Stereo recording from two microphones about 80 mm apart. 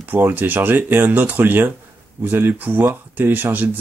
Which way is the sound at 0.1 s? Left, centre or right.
Right.